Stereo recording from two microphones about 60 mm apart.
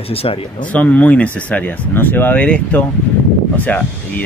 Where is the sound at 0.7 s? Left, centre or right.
Left.